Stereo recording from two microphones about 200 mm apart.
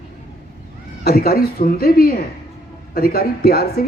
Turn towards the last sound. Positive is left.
turn(degrees=50)  # may be behind; listen again after turning